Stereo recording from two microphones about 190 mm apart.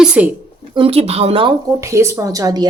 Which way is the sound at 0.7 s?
30° right (ahead or behind).